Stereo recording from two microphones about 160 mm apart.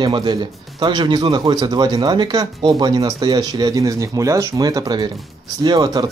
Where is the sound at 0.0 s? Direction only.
30° right (ahead or behind).